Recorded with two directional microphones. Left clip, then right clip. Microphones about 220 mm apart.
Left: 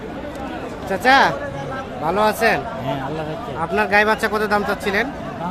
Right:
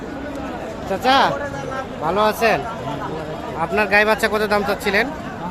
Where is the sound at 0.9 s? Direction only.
10° left (ahead or behind).